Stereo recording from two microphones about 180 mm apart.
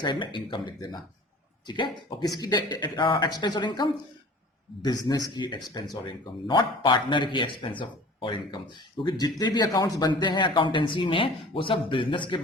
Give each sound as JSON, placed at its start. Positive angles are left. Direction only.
{"t": 0.0, "sound": "speech", "side_deg": 25}
{"t": 5.0, "sound": "speech", "side_deg": 25}